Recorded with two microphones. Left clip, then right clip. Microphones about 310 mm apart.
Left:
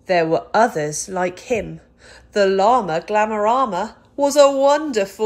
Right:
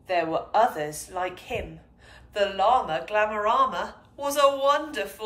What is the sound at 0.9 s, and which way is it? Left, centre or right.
A woman's voice, centre.